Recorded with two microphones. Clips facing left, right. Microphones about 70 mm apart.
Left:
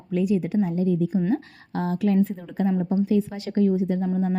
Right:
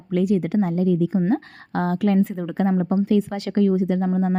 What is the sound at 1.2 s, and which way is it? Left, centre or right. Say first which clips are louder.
A woman's voice: right 3 dB; right.